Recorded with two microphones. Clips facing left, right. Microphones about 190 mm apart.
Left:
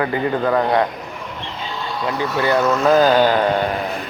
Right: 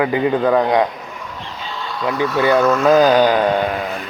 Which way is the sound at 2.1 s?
15° right (ahead or behind).